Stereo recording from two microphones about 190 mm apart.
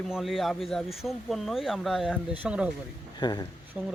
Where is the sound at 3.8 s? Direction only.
10° right (ahead or behind).